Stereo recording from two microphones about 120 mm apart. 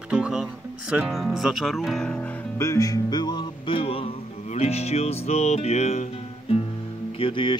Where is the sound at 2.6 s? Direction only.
25° left (ahead or behind); by 6.6 s 60° left (ahead or behind).